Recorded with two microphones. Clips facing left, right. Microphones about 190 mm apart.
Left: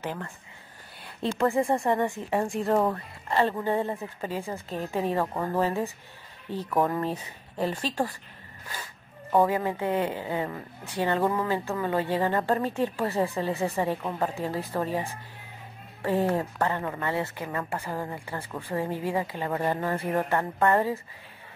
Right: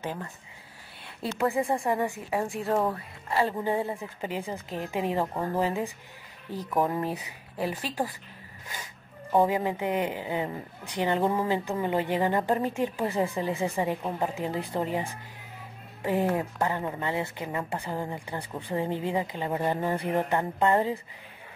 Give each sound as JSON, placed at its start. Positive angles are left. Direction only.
{"t": 0.0, "sound": "a woman's voice", "side_deg": -15}
{"t": 1.4, "sound": "a woman's voice", "side_deg": 0}
{"t": 9.3, "sound": "a woman's voice", "side_deg": -15}